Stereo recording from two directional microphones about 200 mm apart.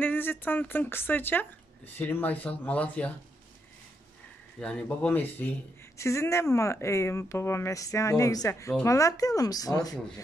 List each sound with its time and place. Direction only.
0.0 s speech: 10° left (ahead or behind)
4.6 s speech: 5° left (ahead or behind)